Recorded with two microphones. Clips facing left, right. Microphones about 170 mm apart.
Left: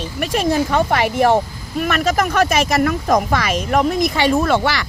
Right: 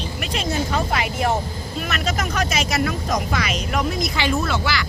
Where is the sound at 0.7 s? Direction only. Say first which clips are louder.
Left 6 dB; 60° left (ahead or behind).